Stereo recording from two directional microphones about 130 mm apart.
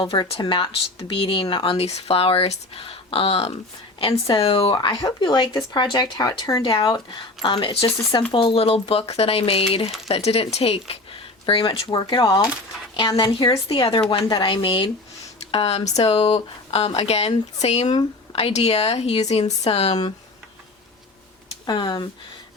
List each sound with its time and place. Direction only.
0.0 s speech: 40° left (ahead or behind)
21.7 s speech: 35° left (ahead or behind)